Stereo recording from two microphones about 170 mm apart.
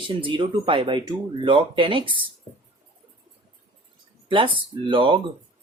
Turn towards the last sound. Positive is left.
turn(degrees=-30)  # may be behind; listen again after turning